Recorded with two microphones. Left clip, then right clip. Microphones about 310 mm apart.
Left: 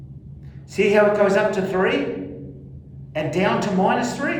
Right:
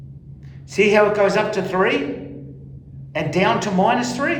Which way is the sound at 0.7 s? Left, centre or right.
Centre.